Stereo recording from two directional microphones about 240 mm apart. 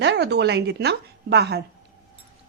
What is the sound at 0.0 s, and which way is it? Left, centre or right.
A woman's voice, right.